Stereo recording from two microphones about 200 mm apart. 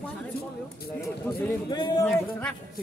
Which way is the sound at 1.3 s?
10° left (ahead or behind).